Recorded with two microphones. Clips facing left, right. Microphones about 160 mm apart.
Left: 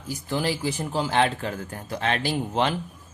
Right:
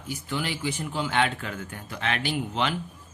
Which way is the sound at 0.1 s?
35° left (ahead or behind).